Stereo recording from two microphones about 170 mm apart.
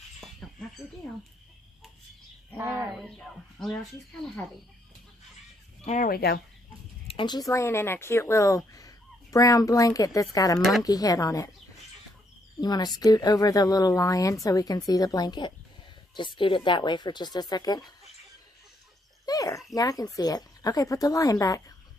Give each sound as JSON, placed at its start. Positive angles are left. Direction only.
{"t": 0.4, "sound": "bird", "side_deg": 0}
{"t": 2.6, "sound": "speech", "side_deg": -10}
{"t": 3.0, "sound": "speech", "side_deg": 0}
{"t": 5.8, "sound": "speech", "side_deg": 45}
{"t": 6.1, "sound": "speech", "side_deg": 65}
{"t": 7.1, "sound": "speech", "side_deg": 25}
{"t": 10.6, "sound": "speech", "side_deg": 0}
{"t": 10.8, "sound": "speech", "side_deg": 20}
{"t": 12.5, "sound": "speech", "side_deg": 25}
{"t": 19.2, "sound": "speech", "side_deg": 20}